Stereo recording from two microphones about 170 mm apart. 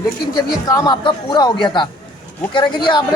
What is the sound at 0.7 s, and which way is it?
A man's voice, 20° left (ahead or behind).